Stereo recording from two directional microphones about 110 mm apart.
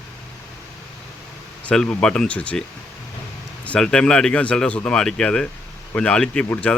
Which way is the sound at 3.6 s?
10° left (ahead or behind).